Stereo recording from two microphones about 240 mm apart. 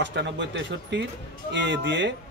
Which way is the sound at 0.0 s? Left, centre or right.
Right.